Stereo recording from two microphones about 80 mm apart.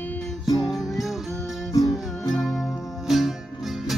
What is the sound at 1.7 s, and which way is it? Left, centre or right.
Music, left.